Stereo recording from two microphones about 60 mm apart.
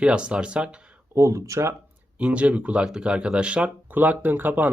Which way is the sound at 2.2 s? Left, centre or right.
Right.